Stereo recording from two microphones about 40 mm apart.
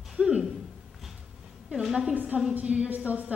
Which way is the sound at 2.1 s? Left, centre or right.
Right.